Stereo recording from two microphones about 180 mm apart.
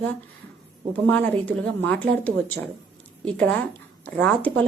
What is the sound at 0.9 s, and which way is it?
A woman's voice, 10° left (ahead or behind).